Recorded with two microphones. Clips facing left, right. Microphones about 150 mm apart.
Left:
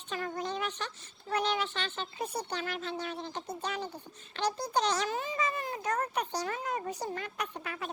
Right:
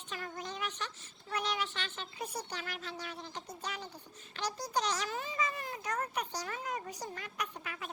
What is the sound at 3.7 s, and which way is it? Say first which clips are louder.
Speech: left 7 dB; 60° left (ahead or behind).